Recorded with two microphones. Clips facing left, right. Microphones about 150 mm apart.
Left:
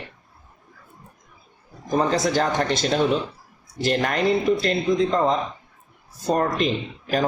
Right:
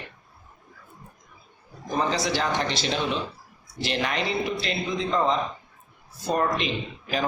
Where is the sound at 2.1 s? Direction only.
45° left (ahead or behind).